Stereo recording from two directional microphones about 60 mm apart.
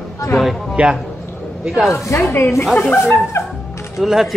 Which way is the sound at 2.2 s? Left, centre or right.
Left.